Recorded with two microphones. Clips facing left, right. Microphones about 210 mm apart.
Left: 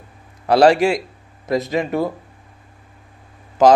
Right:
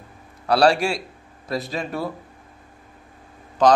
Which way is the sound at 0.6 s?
20° left (ahead or behind).